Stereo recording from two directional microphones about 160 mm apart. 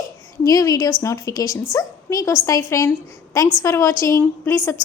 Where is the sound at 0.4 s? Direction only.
25° left (ahead or behind).